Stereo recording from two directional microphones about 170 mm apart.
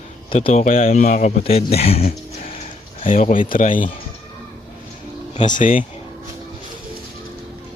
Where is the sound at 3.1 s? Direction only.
50° left (ahead or behind).